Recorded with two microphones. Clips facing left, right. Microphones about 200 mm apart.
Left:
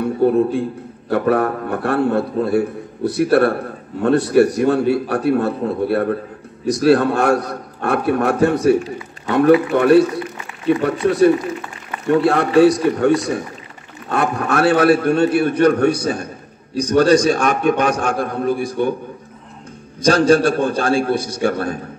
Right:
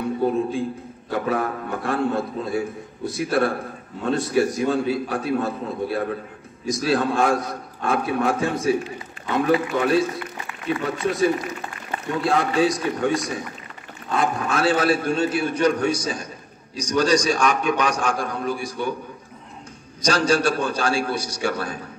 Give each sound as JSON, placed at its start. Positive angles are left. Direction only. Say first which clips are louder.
{"t": 0.0, "sound": "a sound", "louder": "left 7 dB", "side_deg": 60}
{"t": 1.1, "sound": "a man's voice", "louder": "left 7 dB", "side_deg": 60}
{"t": 20.0, "sound": "a man's voice", "louder": "left 7 dB", "side_deg": 55}